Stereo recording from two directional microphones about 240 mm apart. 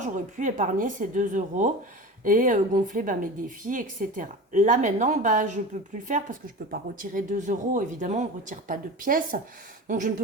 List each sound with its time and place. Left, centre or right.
0.0 s speech: right
6.7 s speech: right